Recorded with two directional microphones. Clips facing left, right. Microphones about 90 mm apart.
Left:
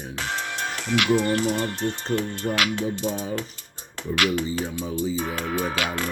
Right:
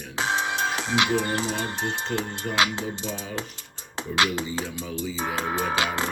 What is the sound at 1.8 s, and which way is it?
Speech, 90° right.